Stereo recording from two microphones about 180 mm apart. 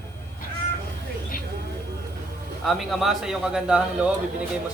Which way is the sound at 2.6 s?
Centre (ahead or behind).